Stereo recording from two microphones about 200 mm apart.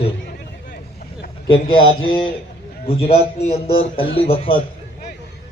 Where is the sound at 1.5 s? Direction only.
25° left (ahead or behind).